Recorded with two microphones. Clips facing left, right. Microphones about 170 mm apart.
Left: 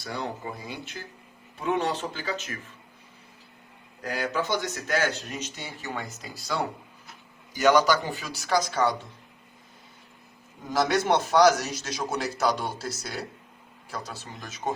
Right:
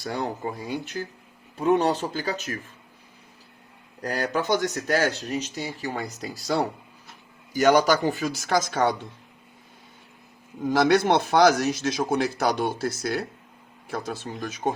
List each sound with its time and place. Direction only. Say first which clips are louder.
0.0 s speech: right 4 dB; 45° right (ahead or behind)
4.0 s speech: right 3 dB; 40° right (ahead or behind)
10.7 s a man's voice: right 4 dB; 60° right (ahead or behind)